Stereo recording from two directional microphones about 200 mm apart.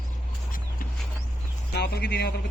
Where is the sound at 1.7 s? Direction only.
55° left (ahead or behind).